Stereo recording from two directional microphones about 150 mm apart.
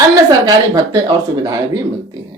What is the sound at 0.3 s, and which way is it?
Speech, 25° right (ahead or behind).